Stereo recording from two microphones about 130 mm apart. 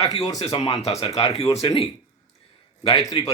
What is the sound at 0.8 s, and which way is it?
Speech, 55° left (ahead or behind).